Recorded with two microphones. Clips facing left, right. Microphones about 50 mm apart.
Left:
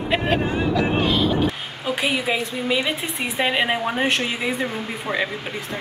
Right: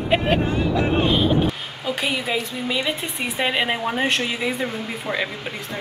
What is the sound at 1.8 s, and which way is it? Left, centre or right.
A woman's voice, centre.